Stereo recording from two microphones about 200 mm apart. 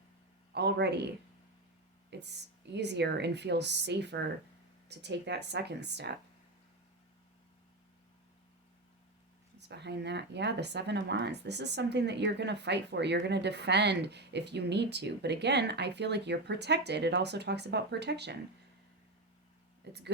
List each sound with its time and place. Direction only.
0.5 s speech: 55° right (ahead or behind)
2.1 s speech: 55° right (ahead or behind)
9.6 s speech: 60° right (ahead or behind)
19.9 s speech: 55° right (ahead or behind)